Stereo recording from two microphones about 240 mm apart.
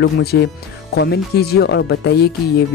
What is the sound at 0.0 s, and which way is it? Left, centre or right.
Speech, left.